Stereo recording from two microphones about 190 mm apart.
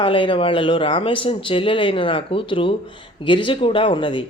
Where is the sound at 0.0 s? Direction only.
25° left (ahead or behind).